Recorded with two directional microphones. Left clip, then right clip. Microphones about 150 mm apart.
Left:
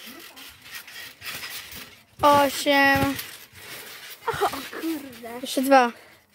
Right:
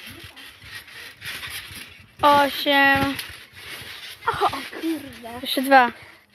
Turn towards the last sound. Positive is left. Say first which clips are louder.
# right 2 dB
turn(degrees=15)  # may be behind; listen again after turning